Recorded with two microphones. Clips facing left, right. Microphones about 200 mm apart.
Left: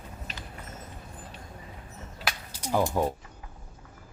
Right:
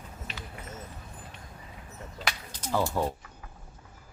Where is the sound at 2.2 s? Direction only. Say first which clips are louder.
Left 1 dB; 10° left (ahead or behind).